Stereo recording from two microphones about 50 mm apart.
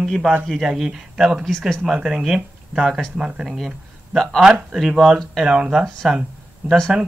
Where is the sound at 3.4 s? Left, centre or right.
Centre.